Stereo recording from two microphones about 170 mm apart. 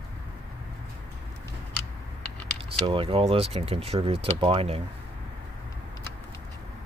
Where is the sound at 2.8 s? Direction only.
30° right (ahead or behind).